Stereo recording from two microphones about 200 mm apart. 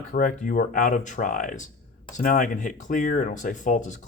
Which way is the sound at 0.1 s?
40° left (ahead or behind).